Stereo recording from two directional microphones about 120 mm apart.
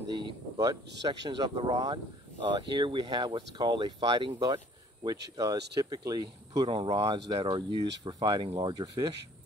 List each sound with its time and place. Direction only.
0.1 s speech: 30° right (ahead or behind)
2.7 s speech: 40° right (ahead or behind)